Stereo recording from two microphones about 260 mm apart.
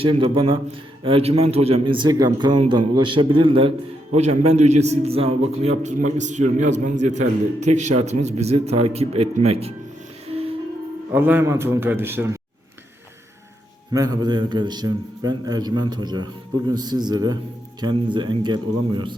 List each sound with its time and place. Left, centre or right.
0.0 s a man's voice: centre
11.1 s a man's voice: centre
13.9 s a man's voice: centre